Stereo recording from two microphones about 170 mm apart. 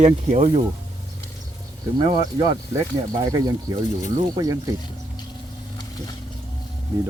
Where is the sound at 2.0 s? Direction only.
30° right (ahead or behind).